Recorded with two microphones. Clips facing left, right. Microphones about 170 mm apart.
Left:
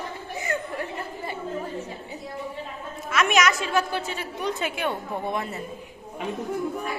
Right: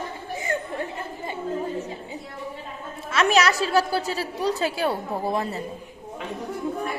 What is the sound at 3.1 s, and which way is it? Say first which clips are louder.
A child's voice: right 2 dB; 35° right (ahead or behind).